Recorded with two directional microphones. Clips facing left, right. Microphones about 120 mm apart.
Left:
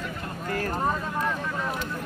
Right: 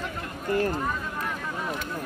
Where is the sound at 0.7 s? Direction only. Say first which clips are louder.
Left 3 dB; 35° left (ahead or behind).